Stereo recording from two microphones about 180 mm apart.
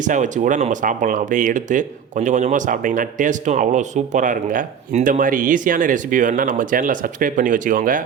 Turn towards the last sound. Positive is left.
turn(degrees=-50)  # may be behind; listen again after turning